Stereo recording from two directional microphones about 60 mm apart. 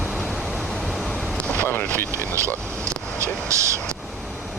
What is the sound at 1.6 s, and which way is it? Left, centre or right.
Vehicle, left.